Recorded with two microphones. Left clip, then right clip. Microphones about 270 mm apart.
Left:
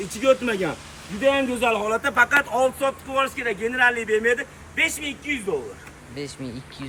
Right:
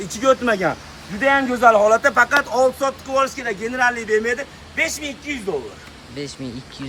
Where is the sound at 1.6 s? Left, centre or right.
Centre.